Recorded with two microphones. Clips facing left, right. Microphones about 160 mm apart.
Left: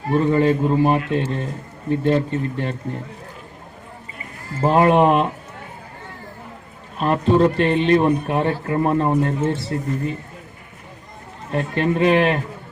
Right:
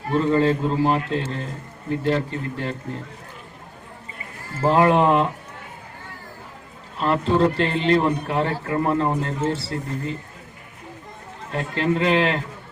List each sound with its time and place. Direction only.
0.1 s a man's voice: 15° left (ahead or behind)
4.6 s a man's voice: 20° left (ahead or behind)
6.9 s a man's voice: 20° left (ahead or behind)
8.6 s speech: 30° left (ahead or behind)
8.9 s a man's voice: 20° left (ahead or behind)
11.5 s a man's voice: 20° left (ahead or behind)